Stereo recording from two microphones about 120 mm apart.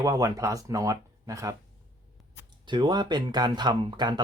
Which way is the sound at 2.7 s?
35° right (ahead or behind).